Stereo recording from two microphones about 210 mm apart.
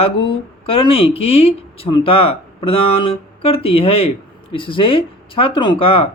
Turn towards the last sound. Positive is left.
turn(degrees=25)  # may be behind; listen again after turning